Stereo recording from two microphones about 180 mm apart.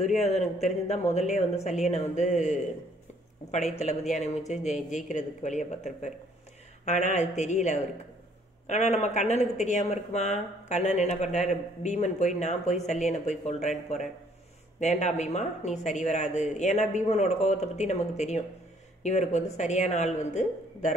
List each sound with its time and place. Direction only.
0.2 s speech: 40° left (ahead or behind)
4.1 s a woman's voice: 40° left (ahead or behind)
6.8 s speech: 40° left (ahead or behind)